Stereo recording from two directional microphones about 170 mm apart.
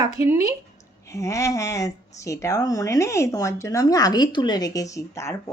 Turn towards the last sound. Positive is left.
turn(degrees=15)  # may be behind; listen again after turning